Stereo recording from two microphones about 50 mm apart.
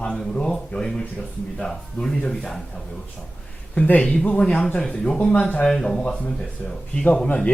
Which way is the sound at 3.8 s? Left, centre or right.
Left.